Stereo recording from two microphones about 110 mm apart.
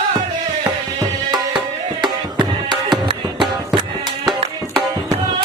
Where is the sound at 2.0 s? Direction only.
45° right (ahead or behind).